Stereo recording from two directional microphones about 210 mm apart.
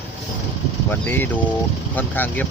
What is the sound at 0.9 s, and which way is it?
Speech, 10° left (ahead or behind).